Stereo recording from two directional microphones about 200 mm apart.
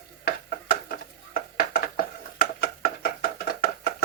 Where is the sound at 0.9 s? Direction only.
50° left (ahead or behind).